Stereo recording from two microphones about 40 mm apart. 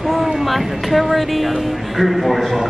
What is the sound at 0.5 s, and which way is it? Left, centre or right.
Speech, centre.